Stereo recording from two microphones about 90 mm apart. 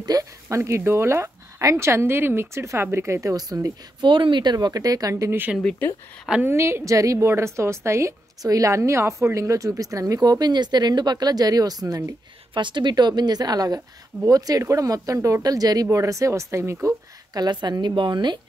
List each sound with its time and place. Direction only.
0.0 s a woman's voice: 40° right (ahead or behind)
4.0 s speech: 60° right (ahead or behind); by 5.3 s 40° right (ahead or behind)
5.8 s speech: 20° left (ahead or behind)
6.4 s a woman's voice: 30° right (ahead or behind); by 12.0 s 45° right (ahead or behind)
12.5 s a woman's voice: 60° right (ahead or behind); by 16.7 s 35° right (ahead or behind)
16.8 s speech: 45° right (ahead or behind)